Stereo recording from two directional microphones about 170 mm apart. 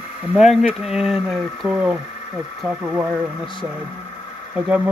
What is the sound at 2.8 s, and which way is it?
Speech, 15° right (ahead or behind).